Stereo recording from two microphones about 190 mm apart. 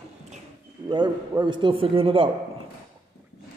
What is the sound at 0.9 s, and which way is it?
A man's voice, 25° right (ahead or behind).